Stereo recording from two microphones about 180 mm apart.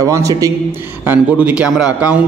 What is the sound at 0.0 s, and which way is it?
A man's voice, 20° right (ahead or behind).